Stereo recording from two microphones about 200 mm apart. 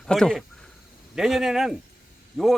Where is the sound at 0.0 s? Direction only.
5° left (ahead or behind).